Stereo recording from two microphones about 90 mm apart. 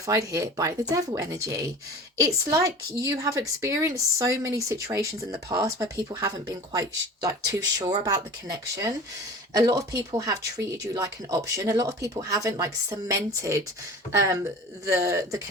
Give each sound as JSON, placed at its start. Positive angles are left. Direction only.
{"t": 0.0, "sound": "a woman's voice", "side_deg": -40}
{"t": 9.5, "sound": "a woman's voice", "side_deg": -45}